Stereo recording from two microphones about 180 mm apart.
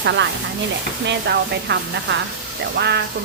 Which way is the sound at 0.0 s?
80° right.